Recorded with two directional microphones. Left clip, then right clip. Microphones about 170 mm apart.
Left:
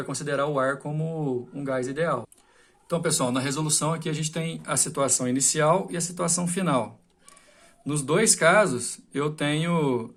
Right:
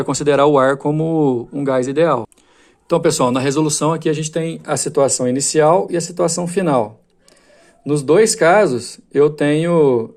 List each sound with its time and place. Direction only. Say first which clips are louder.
0.1 s speech: right 14 dB; 55° right (ahead or behind); by 6.8 s 25° right (ahead or behind)
7.9 s speech: right 11 dB; 30° right (ahead or behind)